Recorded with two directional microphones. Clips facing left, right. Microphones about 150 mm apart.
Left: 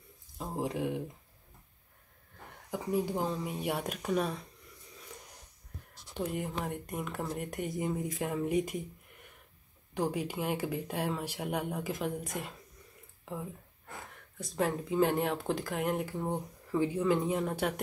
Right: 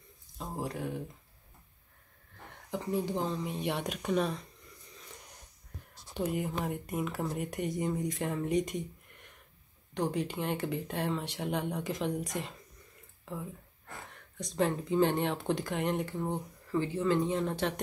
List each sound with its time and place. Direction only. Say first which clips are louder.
0.4 s a sound: left 3 dB; 15° left (ahead or behind)
2.7 s speech: left 1 dB; 10° left (ahead or behind)
6.1 s speech: right 2 dB; centre (ahead or behind)
14.4 s speech: right 1 dB; 5° left (ahead or behind)